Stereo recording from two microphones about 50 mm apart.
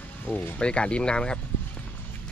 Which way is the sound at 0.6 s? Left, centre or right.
Left.